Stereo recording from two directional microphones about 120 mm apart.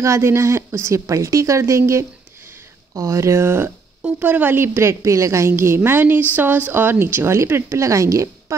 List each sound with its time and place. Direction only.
0.0 s a woman's voice: 25° right (ahead or behind)